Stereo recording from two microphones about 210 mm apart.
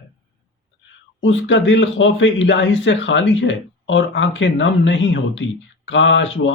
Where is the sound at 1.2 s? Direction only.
60° left (ahead or behind).